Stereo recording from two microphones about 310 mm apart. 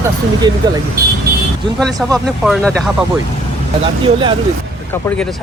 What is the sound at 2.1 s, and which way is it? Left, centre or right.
Speech, centre.